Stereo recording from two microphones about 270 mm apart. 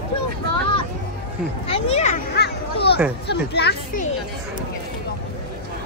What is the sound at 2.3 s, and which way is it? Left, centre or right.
Speech, left.